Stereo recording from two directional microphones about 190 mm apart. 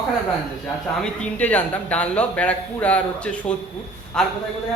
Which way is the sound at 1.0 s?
5° left (ahead or behind).